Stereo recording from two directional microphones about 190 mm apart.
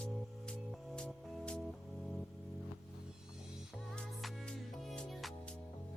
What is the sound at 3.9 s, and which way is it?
Music, centre (ahead or behind).